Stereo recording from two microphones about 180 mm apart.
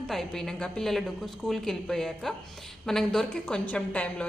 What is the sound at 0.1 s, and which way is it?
A woman's voice, centre (ahead or behind).